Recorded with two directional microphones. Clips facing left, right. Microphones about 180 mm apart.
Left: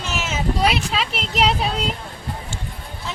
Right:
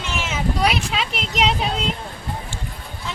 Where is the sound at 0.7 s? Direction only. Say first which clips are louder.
Left 1 dB; centre (ahead or behind).